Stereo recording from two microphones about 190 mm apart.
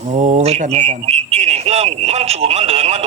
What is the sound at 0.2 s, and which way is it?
A man's voice, 40° right (ahead or behind).